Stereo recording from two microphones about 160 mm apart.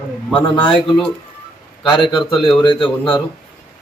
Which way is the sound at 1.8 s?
30° left (ahead or behind).